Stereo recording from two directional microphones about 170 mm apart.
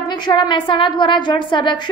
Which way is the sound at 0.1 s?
25° left (ahead or behind).